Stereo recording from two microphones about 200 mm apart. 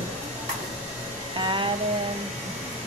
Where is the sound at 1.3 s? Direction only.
25° right (ahead or behind).